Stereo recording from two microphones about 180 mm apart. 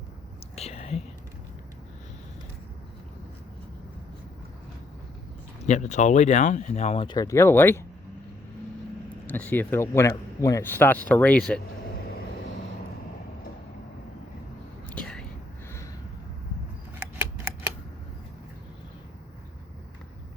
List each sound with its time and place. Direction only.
0.5 s whispering: 35° left (ahead or behind)
5.6 s speech: 40° left (ahead or behind); by 7.8 s 10° left (ahead or behind)
9.2 s speech: 10° left (ahead or behind)
14.8 s whispering: 5° left (ahead or behind)
17.0 s scissors: 10° right (ahead or behind)